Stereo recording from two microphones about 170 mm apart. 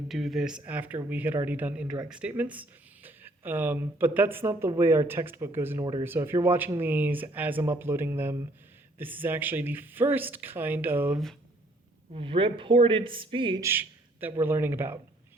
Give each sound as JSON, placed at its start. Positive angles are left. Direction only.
{"t": 0.1, "sound": "speech", "side_deg": 0}
{"t": 12.1, "sound": "speech", "side_deg": -30}
{"t": 13.6, "sound": "speech", "side_deg": -15}